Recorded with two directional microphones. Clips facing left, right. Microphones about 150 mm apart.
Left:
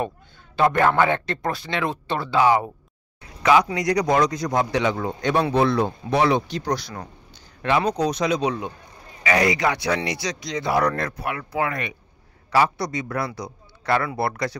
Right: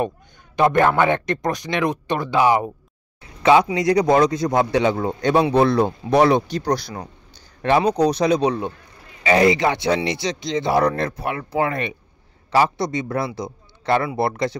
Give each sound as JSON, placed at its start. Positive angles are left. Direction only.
{"t": 0.6, "sound": "speech", "side_deg": -20}
{"t": 3.7, "sound": "speech", "side_deg": -25}